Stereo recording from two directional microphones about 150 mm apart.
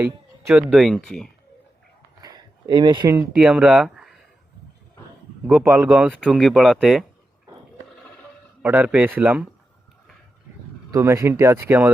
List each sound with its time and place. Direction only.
0.0 s music: 15° right (ahead or behind)
0.7 s speech: centre (ahead or behind)
2.2 s a sound: 25° right (ahead or behind)
3.3 s speech: 5° right (ahead or behind)
5.5 s speech: 5° right (ahead or behind)
8.6 s speech: 10° right (ahead or behind)
10.9 s speech: 20° right (ahead or behind)